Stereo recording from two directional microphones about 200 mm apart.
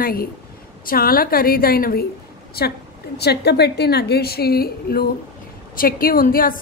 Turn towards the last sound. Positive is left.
turn(degrees=45)  # may be behind; listen again after turning